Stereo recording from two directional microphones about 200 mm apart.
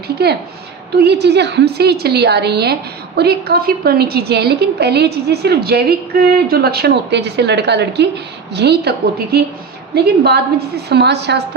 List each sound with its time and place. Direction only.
0.2 s a woman's voice: 55° right (ahead or behind)